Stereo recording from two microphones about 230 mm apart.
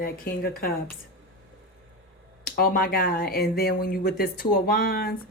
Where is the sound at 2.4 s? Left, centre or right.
Left.